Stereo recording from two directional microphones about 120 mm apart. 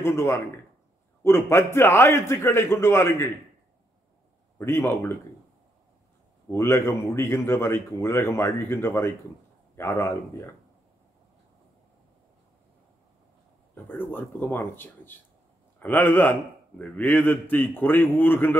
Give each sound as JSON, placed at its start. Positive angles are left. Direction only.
{"t": 0.0, "sound": "speech", "side_deg": 20}
{"t": 4.6, "sound": "speech", "side_deg": 20}
{"t": 6.5, "sound": "speech", "side_deg": 20}
{"t": 13.7, "sound": "a man's voice", "side_deg": 15}